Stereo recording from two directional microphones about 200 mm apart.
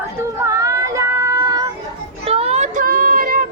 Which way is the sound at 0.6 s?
15° right (ahead or behind).